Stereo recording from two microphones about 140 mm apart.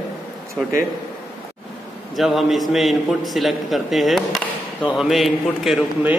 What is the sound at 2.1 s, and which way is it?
A man's voice, centre (ahead or behind).